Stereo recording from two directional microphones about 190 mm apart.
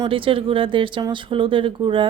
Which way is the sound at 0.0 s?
25° right (ahead or behind).